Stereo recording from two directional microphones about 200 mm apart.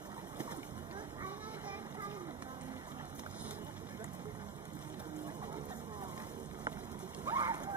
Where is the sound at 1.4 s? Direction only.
10° right (ahead or behind).